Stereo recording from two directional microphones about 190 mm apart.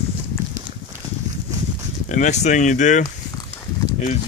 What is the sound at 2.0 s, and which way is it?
Speech, 40° left (ahead or behind).